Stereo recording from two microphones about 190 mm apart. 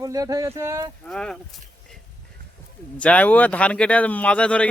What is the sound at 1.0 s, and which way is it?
Speech, 5° left (ahead or behind).